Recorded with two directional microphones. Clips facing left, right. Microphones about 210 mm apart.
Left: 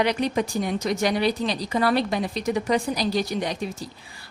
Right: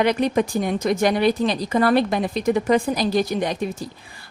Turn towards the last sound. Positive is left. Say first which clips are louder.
# right 4 dB
turn(degrees=-55)  # may be behind; listen again after turning